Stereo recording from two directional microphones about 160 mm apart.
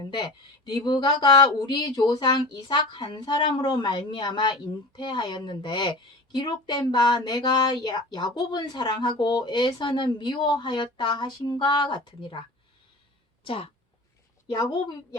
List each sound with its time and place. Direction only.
0.0 s a woman's voice: 25° left (ahead or behind)